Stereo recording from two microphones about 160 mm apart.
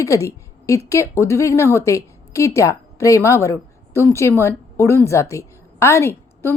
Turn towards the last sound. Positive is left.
turn(degrees=15)  # may be behind; listen again after turning